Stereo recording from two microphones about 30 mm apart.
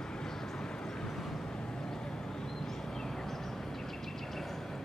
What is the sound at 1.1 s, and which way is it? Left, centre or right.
Vehicle, centre.